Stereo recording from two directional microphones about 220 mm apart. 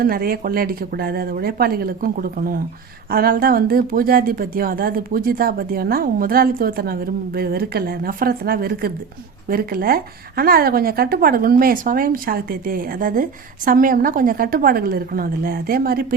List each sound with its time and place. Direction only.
0.0 s speech: 40° right (ahead or behind)